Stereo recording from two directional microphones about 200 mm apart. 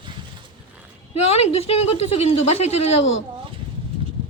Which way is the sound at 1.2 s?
30° left (ahead or behind).